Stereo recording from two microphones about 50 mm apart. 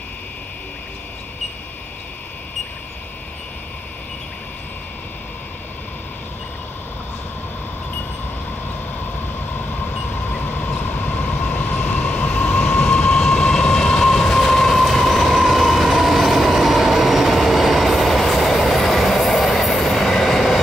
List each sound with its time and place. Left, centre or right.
10.3 s vehicle: left
10.8 s train: left; by 20.6 s centre